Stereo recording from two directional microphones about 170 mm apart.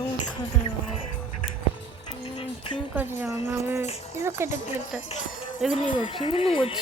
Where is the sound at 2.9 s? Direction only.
10° right (ahead or behind).